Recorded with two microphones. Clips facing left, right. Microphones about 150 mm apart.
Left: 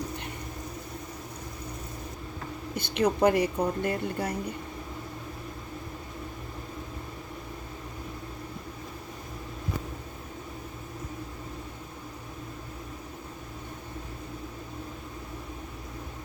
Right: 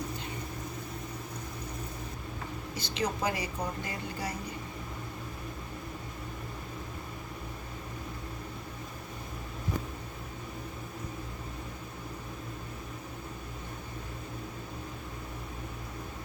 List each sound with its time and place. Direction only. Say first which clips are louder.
2.7 s a woman's voice: left 8 dB; 55° left (ahead or behind)